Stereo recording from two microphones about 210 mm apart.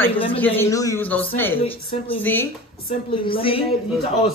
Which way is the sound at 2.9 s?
25° left (ahead or behind).